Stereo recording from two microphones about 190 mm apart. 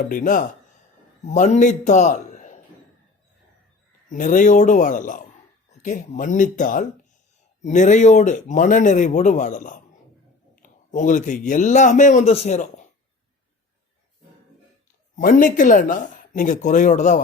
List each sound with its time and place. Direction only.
0.1 s a man's voice: 45° left (ahead or behind)
4.1 s a man's voice: 45° left (ahead or behind)
15.1 s speech: 45° left (ahead or behind)